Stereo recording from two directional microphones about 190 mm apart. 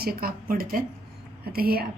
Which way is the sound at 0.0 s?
55° right (ahead or behind).